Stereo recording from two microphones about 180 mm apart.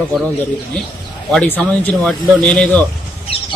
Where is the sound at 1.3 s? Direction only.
10° left (ahead or behind).